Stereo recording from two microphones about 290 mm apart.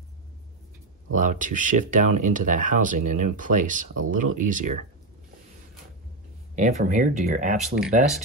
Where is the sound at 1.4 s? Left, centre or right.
Right.